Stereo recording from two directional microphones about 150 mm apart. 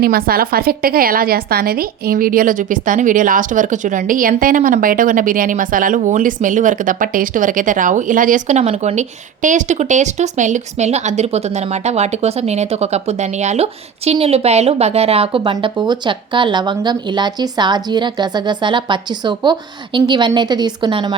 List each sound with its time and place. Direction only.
0.0 s a woman's voice: 85° right; by 21.2 s 30° right (ahead or behind)